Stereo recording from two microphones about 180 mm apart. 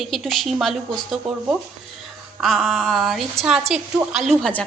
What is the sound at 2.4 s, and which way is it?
A woman's voice, centre (ahead or behind).